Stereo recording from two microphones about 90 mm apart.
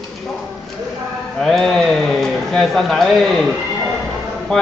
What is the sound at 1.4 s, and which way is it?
A man's voice, 5° left (ahead or behind).